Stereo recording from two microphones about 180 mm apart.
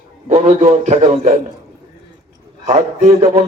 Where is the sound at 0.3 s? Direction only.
40° right (ahead or behind).